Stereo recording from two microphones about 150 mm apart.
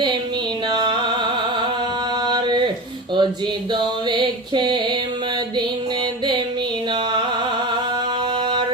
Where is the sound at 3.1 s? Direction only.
30° right (ahead or behind).